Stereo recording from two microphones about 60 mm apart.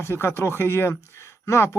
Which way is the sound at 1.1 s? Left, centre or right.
Left.